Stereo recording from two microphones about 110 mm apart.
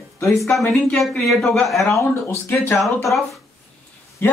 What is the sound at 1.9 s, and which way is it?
Speech, 25° left (ahead or behind).